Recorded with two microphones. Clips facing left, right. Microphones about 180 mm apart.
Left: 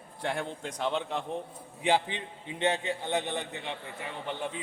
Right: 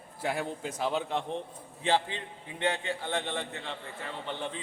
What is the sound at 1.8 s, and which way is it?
A man's voice, 15° left (ahead or behind).